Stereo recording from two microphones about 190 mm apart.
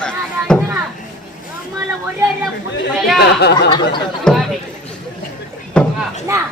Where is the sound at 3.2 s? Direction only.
65° left (ahead or behind).